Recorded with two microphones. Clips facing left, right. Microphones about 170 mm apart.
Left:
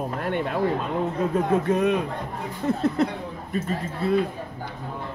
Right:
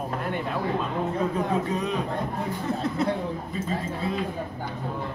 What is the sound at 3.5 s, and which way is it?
Speech, 65° left (ahead or behind).